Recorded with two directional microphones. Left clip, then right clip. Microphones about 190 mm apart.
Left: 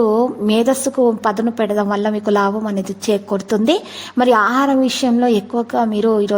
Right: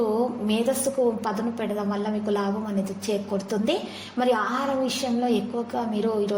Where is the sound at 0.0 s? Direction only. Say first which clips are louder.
Left 9 dB; 45° left (ahead or behind).